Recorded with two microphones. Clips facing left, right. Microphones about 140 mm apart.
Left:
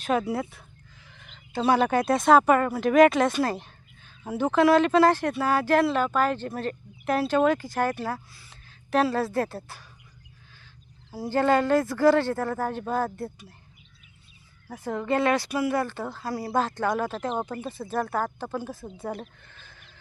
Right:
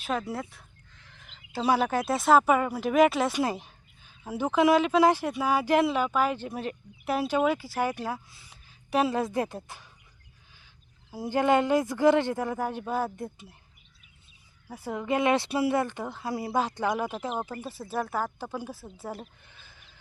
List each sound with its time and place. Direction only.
0.0 s a woman's voice: centre (ahead or behind); by 9.8 s 15° right (ahead or behind)
11.1 s speech: 15° right (ahead or behind)
14.7 s speech: 10° right (ahead or behind)
15.3 s speech: 25° right (ahead or behind); by 19.3 s 5° right (ahead or behind)
19.5 s sheep: 10° right (ahead or behind)